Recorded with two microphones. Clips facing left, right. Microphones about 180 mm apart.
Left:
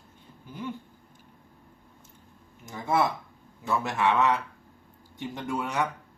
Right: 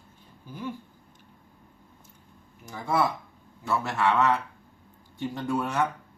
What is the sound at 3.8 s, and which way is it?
Speech, 15° left (ahead or behind).